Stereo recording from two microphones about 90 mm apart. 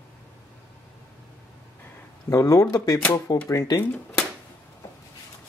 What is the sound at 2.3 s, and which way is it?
Speech, 40° left (ahead or behind).